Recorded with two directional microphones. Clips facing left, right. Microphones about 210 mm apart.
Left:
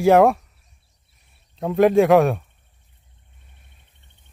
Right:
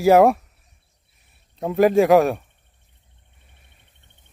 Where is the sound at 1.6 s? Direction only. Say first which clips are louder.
Left 1 dB; centre (ahead or behind).